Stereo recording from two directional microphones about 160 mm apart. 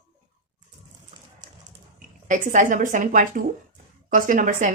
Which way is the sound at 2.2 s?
50° right (ahead or behind).